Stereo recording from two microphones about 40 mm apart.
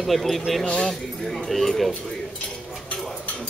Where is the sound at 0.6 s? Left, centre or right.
Left.